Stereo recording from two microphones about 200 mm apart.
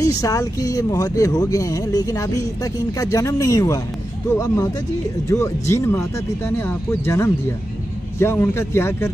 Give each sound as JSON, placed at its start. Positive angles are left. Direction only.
{"t": 0.2, "sound": "speech", "side_deg": 15}